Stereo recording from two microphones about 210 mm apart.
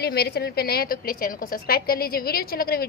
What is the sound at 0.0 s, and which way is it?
A woman's voice, 50° left (ahead or behind).